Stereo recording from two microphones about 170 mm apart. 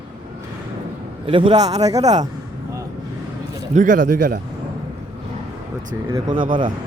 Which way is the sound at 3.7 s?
50° right (ahead or behind).